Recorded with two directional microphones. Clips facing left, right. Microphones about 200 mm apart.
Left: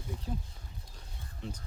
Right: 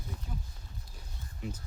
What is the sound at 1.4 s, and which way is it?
Speech, 10° right (ahead or behind).